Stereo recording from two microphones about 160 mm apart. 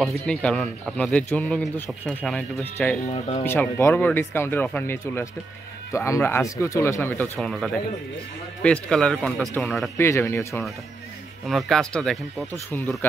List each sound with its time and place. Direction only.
0.0 s a man's voice: 5° left (ahead or behind)
3.1 s speech: 40° left (ahead or behind)
3.4 s a man's voice: 15° left (ahead or behind)
7.3 s speech: centre (ahead or behind)
9.9 s a man's voice: 15° left (ahead or behind)
11.4 s speech: centre (ahead or behind)